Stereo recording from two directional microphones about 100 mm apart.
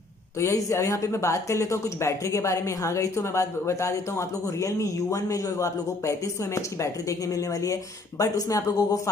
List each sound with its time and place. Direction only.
0.4 s speech: 30° left (ahead or behind)